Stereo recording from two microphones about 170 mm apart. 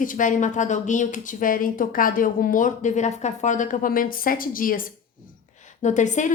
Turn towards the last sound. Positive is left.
turn(degrees=45)  # may be behind; listen again after turning